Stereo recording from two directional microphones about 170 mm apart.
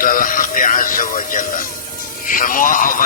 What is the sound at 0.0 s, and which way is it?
Speech, 55° left (ahead or behind).